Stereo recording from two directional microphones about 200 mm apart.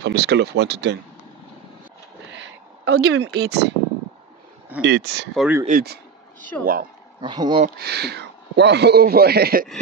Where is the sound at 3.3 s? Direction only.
55° right (ahead or behind).